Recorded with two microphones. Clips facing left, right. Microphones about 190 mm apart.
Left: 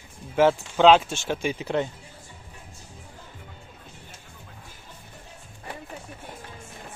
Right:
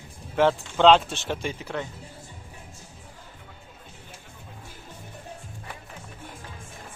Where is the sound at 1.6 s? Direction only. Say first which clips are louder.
Left 6 dB; 25° left (ahead or behind).